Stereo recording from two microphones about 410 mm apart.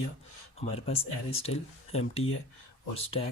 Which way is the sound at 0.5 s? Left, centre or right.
Centre.